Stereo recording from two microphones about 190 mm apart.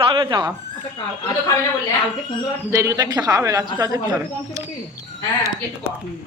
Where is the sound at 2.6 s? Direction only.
15° right (ahead or behind).